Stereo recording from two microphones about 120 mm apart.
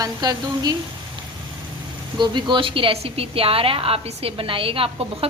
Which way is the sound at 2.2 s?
40° right (ahead or behind).